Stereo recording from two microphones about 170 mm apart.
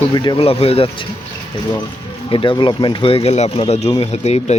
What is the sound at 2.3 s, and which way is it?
Speech, 30° left (ahead or behind).